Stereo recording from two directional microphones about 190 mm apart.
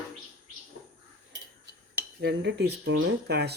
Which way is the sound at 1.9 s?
60° right (ahead or behind).